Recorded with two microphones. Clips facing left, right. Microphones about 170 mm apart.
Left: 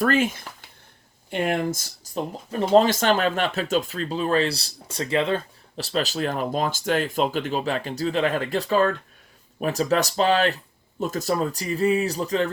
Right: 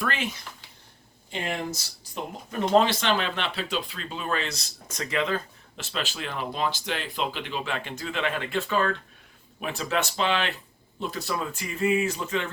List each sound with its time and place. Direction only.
0.0 s speech: 45° left (ahead or behind)
2.1 s speech: 35° left (ahead or behind)
2.7 s speech: 45° left (ahead or behind)